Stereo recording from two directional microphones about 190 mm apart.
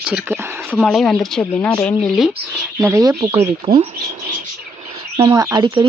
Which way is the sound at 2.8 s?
15° right (ahead or behind).